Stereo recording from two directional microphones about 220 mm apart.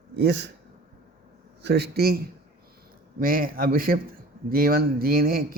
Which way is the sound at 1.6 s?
50° right (ahead or behind).